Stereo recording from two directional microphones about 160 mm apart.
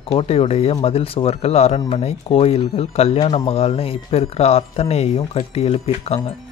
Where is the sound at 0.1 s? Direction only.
35° left (ahead or behind).